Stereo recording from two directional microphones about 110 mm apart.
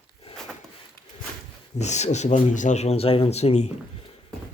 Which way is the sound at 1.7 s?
90° left.